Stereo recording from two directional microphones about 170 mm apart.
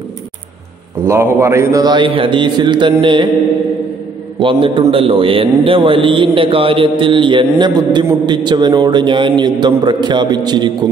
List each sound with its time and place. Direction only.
1.0 s a man's voice: 15° right (ahead or behind)
4.4 s a man's voice: 30° right (ahead or behind)